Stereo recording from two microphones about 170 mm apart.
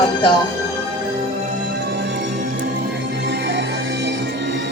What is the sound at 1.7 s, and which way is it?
Music, 85° right.